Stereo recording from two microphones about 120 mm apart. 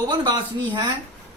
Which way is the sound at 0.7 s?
40° right (ahead or behind).